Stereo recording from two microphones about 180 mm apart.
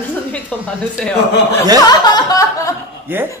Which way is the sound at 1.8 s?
25° left (ahead or behind).